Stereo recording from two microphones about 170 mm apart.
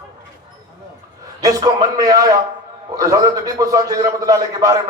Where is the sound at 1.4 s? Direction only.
20° right (ahead or behind).